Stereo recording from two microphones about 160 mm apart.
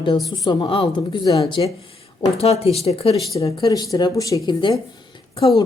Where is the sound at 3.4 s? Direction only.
25° left (ahead or behind).